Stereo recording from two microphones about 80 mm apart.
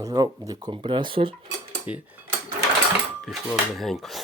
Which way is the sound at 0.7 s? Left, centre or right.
Right.